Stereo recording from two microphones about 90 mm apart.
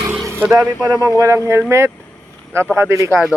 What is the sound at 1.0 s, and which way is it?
Speech, 35° right (ahead or behind).